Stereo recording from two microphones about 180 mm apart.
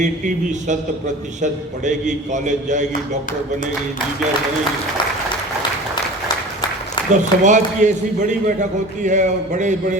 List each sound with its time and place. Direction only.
1.4 s speech: 40° right (ahead or behind)
7.1 s speech: 40° right (ahead or behind)